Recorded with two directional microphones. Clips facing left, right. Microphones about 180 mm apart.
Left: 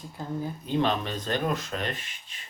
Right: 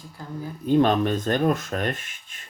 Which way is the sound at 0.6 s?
50° right (ahead or behind).